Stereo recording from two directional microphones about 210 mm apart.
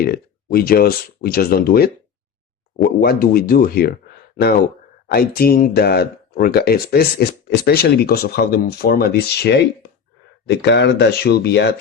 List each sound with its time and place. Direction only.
0.0 s speech: 45° left (ahead or behind)
5.0 s speech: 45° left (ahead or behind)